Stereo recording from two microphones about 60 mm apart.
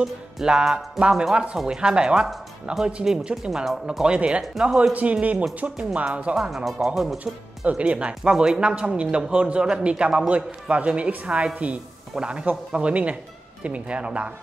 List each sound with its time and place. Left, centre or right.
0.0 s speech: centre
4.0 s a man's voice: centre
6.3 s speech: centre
7.6 s a man's voice: right